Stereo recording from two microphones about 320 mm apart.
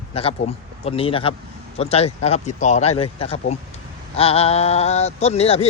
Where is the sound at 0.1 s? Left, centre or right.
Centre.